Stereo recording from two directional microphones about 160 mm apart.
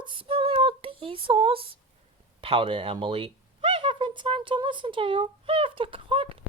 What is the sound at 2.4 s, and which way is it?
Speech, 35° right (ahead or behind).